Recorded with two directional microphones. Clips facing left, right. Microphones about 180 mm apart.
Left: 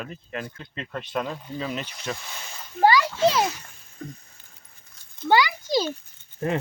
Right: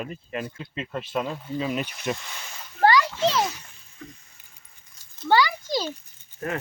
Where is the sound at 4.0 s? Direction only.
35° left (ahead or behind).